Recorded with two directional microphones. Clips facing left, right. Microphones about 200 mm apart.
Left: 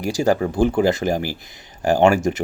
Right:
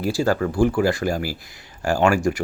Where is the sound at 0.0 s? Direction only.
15° left (ahead or behind).